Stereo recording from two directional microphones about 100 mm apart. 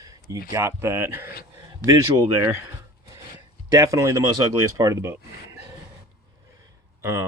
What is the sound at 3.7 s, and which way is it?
Speech, 35° right (ahead or behind).